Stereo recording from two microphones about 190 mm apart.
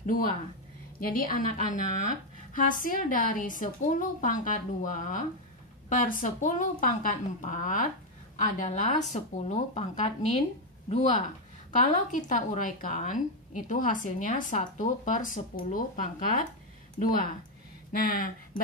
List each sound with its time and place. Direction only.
0.0 s a woman's voice: 45° left (ahead or behind)
17.9 s a woman's voice: 45° left (ahead or behind)